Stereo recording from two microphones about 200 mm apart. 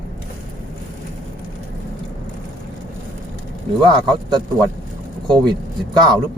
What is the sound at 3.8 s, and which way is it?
Speech, 25° right (ahead or behind).